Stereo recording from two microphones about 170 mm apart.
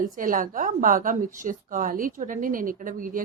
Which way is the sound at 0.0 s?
55° right (ahead or behind).